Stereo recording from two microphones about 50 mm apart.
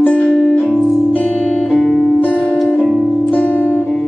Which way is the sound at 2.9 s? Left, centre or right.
Centre.